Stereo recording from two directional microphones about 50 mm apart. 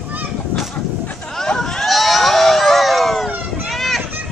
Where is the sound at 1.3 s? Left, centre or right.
Centre.